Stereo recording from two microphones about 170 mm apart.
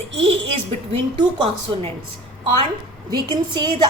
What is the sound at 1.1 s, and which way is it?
Speech, 25° right (ahead or behind).